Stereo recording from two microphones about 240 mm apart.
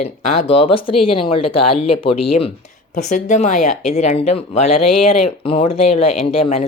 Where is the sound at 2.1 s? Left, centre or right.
Left.